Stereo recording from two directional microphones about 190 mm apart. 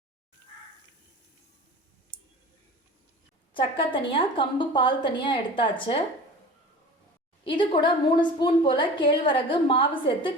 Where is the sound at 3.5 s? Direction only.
25° left (ahead or behind).